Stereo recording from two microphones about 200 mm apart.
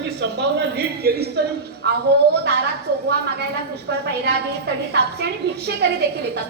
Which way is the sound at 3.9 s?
60° right (ahead or behind).